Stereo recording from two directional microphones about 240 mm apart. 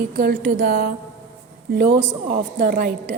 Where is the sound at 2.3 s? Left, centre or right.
Right.